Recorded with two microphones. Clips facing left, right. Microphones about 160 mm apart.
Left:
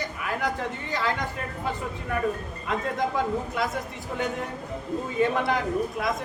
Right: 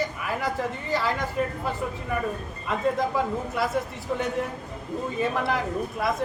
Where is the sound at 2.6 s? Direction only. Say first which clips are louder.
Right 2 dB; centre (ahead or behind).